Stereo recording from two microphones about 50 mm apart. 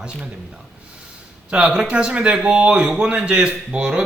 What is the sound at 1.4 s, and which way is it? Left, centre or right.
Speech, centre.